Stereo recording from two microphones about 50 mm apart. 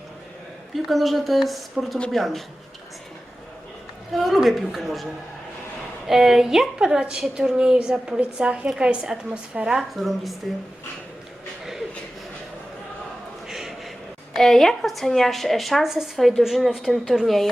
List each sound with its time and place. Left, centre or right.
0.7 s speech: centre
4.1 s speech: centre
6.1 s a woman's voice: centre
9.7 s speech: centre
13.5 s a sound: centre
14.3 s speech: centre
16.1 s speech: centre